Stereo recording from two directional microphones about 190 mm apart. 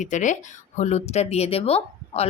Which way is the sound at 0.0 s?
40° left (ahead or behind).